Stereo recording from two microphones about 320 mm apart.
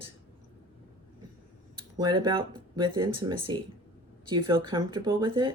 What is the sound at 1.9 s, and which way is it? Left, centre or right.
Speech, centre.